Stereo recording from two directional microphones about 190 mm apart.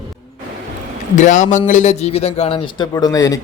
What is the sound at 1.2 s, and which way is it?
A man's voice, 40° left (ahead or behind).